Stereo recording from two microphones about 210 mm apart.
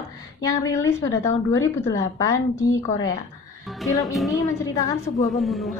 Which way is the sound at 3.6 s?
Centre (ahead or behind).